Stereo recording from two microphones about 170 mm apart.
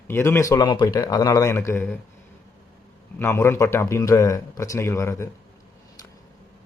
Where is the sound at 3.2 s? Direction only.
15° left (ahead or behind).